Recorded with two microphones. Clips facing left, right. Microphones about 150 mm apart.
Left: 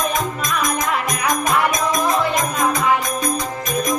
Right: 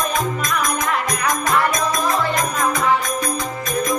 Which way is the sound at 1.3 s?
20° left (ahead or behind).